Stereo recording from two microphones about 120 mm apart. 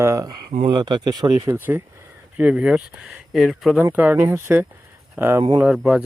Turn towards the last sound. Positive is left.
turn(degrees=-5)  # may be behind; listen again after turning